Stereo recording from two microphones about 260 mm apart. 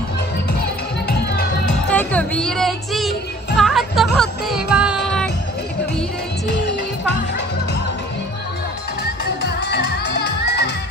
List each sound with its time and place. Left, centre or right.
1.0 s music: left
1.9 s music: centre
9.0 s music: left